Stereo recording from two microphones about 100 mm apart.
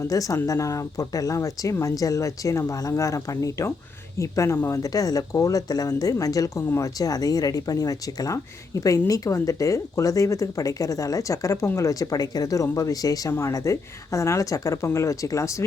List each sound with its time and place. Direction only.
0.0 s speech: 35° left (ahead or behind)